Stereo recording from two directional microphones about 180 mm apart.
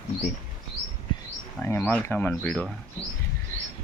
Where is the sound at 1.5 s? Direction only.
10° left (ahead or behind).